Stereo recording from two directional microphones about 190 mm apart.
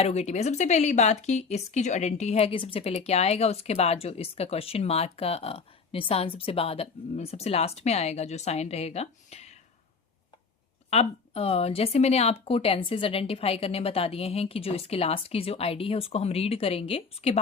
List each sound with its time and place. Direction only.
0.0 s speech: 35° left (ahead or behind)
10.8 s speech: 30° left (ahead or behind)